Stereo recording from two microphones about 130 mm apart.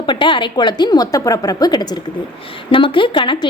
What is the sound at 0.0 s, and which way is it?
A woman's voice, 40° left (ahead or behind).